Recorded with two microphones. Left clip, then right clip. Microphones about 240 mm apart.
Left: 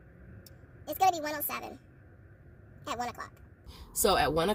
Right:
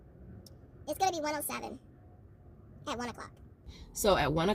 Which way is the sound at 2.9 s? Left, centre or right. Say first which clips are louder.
Left 3 dB; centre.